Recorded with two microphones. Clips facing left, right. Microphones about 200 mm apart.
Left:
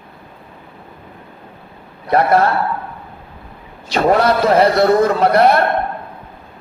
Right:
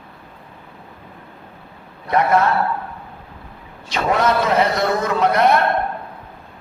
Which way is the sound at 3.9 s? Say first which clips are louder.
Left 5 dB; 35° left (ahead or behind).